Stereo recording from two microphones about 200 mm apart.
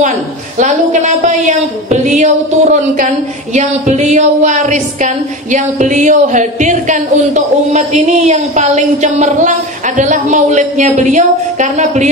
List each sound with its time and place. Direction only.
0.6 s a woman's voice: 40° right (ahead or behind)